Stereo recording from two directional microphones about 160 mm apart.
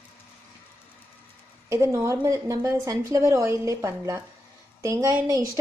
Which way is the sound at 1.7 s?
20° right (ahead or behind).